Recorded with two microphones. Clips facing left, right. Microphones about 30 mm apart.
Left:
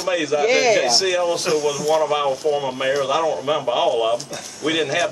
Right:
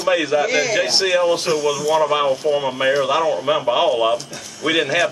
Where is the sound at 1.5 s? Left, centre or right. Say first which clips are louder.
Right 1 dB; centre.